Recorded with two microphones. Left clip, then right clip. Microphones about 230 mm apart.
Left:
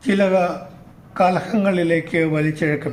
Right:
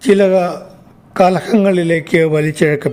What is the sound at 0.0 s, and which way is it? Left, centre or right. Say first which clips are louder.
Speech: right 6 dB; right.